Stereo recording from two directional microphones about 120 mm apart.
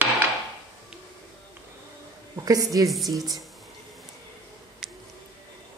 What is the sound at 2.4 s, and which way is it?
Speech, 30° right (ahead or behind).